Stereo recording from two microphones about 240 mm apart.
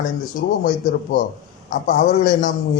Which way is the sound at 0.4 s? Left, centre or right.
Left.